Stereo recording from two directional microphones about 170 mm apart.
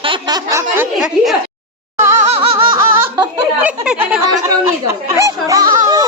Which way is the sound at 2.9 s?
15° right (ahead or behind).